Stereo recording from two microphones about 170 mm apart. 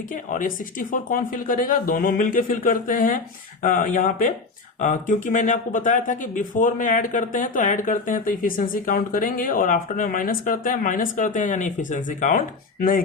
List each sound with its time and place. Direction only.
0.1 s speech: 50° left (ahead or behind)